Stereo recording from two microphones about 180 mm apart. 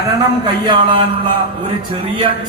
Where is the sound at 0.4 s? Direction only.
25° right (ahead or behind).